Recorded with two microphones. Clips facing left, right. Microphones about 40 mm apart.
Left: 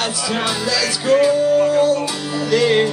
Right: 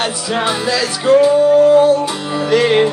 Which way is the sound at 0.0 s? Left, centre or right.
Right.